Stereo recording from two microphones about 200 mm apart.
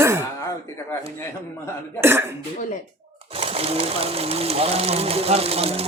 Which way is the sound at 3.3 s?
30° right (ahead or behind).